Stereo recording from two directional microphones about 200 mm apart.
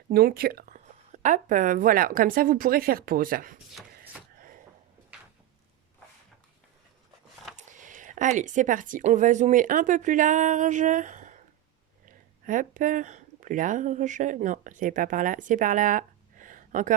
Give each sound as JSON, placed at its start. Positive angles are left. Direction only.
{"t": 0.1, "sound": "speech", "side_deg": -50}
{"t": 7.5, "sound": "speech", "side_deg": -40}